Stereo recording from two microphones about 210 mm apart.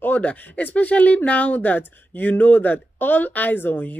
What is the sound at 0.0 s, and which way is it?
Speech, 5° left (ahead or behind).